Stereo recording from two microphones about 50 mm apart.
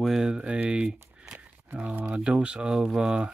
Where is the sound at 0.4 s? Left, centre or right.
Right.